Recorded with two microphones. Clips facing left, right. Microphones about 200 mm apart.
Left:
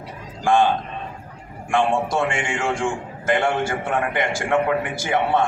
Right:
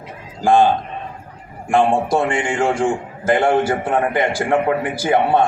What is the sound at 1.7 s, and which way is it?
A man's voice, 35° right (ahead or behind).